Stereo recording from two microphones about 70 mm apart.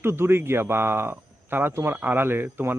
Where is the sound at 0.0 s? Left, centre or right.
Right.